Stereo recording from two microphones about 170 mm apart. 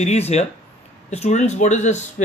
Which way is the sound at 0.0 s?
40° left (ahead or behind).